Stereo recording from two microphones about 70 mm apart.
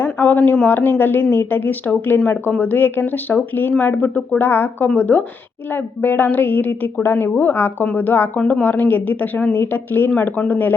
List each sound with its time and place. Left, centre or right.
0.0 s a woman's voice: left